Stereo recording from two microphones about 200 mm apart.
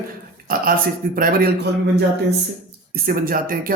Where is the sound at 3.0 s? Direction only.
45° right (ahead or behind).